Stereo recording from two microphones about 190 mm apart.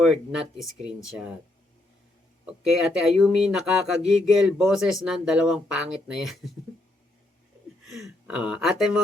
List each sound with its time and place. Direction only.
0.0 s speech: centre (ahead or behind)
2.5 s speech: centre (ahead or behind)
7.9 s speech: centre (ahead or behind)